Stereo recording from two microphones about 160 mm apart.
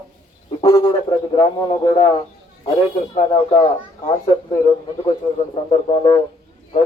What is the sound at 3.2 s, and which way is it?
Speech, 30° left (ahead or behind).